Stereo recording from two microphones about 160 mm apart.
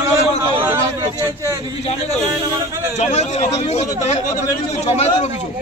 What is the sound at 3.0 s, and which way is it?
Speech, 45° left (ahead or behind).